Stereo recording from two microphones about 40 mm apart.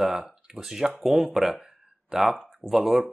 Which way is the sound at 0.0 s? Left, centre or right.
Centre.